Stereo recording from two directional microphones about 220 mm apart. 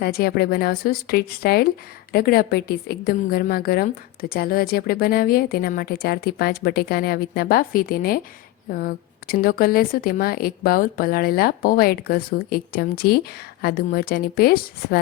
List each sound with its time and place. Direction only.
0.0 s a woman's voice: 45° left (ahead or behind)